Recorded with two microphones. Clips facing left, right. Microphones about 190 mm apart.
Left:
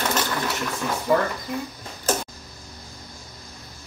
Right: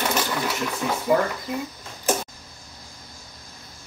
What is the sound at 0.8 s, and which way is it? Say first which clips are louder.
Speech: right 1 dB; 5° right (ahead or behind).